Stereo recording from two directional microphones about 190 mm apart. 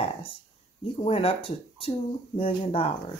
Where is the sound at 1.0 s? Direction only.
30° left (ahead or behind).